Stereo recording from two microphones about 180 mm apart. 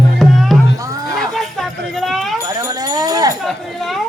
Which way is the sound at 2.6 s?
20° right (ahead or behind).